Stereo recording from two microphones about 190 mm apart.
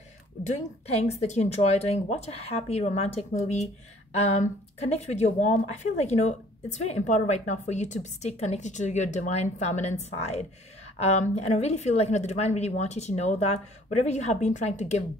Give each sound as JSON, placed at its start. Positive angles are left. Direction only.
{"t": 0.5, "sound": "speech", "side_deg": 35}